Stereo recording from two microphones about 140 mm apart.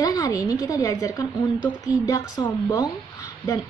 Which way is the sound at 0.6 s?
25° left (ahead or behind).